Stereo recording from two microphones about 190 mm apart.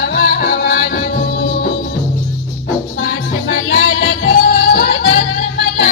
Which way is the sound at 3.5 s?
65° left (ahead or behind).